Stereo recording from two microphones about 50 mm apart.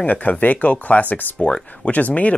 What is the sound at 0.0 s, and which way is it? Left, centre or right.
Speech, left.